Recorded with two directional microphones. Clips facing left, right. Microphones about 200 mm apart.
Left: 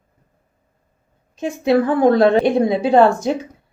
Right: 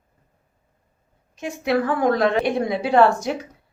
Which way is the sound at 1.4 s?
25° left (ahead or behind).